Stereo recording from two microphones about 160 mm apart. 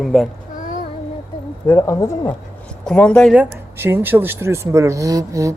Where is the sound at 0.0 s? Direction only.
Centre (ahead or behind).